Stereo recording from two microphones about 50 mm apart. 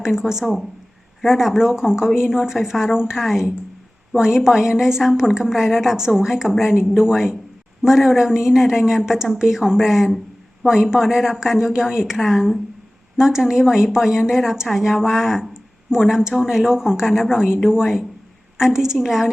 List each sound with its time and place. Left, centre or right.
0.0 s speech: centre